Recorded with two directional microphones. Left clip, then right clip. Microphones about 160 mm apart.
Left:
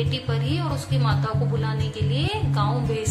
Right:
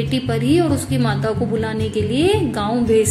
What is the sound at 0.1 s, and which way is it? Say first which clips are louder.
A woman's voice: right 10 dB; 35° right (ahead or behind).